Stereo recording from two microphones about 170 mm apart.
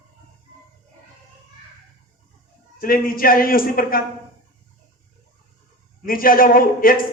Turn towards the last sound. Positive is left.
turn(degrees=55)  # may be behind; listen again after turning